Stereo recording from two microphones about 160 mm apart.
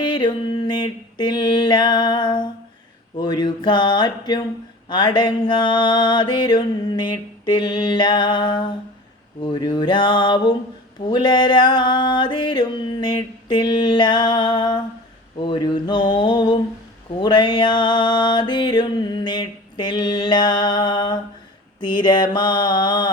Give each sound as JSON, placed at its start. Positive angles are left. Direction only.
{"t": 0.0, "sound": "mantra", "side_deg": 30}
{"t": 3.2, "sound": "music", "side_deg": 25}